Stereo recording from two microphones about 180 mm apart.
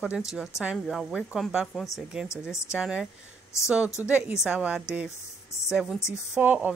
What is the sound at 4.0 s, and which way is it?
A woman's voice, 10° right (ahead or behind).